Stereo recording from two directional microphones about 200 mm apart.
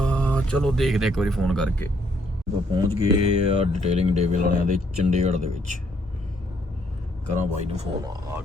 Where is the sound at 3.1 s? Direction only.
35° right (ahead or behind).